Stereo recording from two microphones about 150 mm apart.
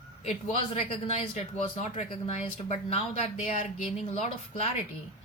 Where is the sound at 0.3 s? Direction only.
45° left (ahead or behind).